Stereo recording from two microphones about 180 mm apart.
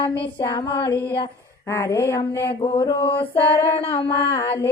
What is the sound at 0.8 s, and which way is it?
Mantra, 25° left (ahead or behind).